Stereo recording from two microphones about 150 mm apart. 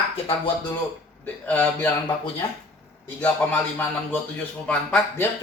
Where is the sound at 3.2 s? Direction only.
10° left (ahead or behind).